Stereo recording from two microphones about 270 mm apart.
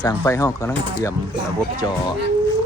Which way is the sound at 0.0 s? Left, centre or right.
Centre.